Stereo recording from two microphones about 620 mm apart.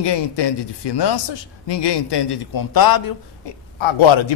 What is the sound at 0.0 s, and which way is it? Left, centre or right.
A man's voice, left.